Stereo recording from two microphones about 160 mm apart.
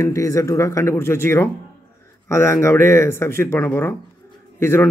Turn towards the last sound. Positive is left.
turn(degrees=15)  # may be behind; listen again after turning